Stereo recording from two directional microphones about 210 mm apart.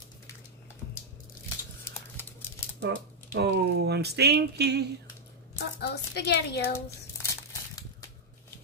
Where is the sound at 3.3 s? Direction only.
50° right (ahead or behind).